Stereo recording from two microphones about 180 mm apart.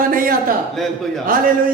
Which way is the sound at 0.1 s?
50° right (ahead or behind).